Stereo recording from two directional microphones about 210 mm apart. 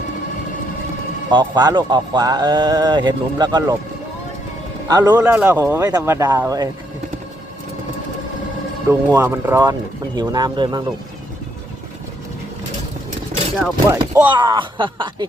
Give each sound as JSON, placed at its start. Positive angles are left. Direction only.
{"t": 1.3, "sound": "speech", "side_deg": -20}
{"t": 4.9, "sound": "speech", "side_deg": -20}
{"t": 8.9, "sound": "speech", "side_deg": -10}
{"t": 13.6, "sound": "speech", "side_deg": -15}
{"t": 14.3, "sound": "speech", "side_deg": -20}